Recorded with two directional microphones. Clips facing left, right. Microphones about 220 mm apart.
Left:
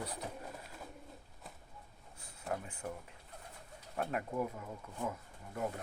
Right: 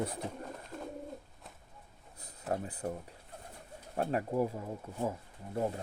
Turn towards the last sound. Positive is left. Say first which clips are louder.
# right 5 dB
turn(degrees=-30)  # may be behind; listen again after turning